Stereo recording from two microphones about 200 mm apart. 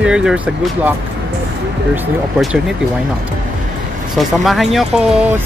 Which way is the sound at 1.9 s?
5° right (ahead or behind).